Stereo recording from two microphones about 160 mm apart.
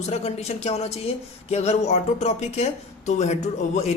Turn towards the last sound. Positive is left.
turn(degrees=45)  # may be behind; listen again after turning